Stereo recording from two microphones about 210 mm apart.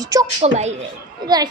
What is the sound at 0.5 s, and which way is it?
Speech, 30° right (ahead or behind).